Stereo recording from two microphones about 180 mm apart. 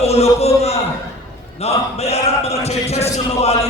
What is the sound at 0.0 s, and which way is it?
A man's voice, 35° left (ahead or behind).